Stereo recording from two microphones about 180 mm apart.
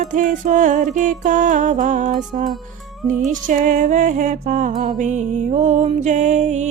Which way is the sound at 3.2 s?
45° right (ahead or behind).